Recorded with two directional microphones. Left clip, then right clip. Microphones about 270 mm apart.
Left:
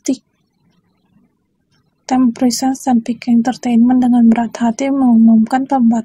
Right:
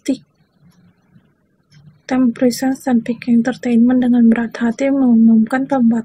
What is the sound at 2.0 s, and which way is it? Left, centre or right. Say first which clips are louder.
A woman's voice: left 1 dB; left.